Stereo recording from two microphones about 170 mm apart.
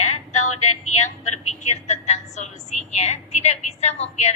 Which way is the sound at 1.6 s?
40° left (ahead or behind).